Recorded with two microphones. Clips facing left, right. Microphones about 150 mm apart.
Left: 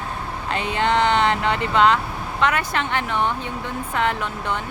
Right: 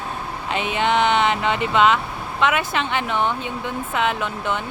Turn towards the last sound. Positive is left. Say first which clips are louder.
# right 1 dB
turn(degrees=-20)  # may be behind; listen again after turning